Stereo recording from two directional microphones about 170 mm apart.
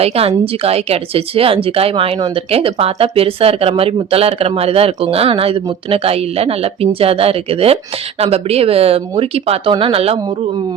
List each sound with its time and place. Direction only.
0.0 s speech: 35° right (ahead or behind)